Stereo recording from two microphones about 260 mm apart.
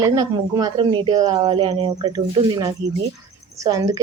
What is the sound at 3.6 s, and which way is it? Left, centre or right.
Speech, centre.